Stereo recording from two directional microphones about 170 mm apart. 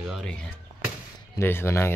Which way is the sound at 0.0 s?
Centre (ahead or behind).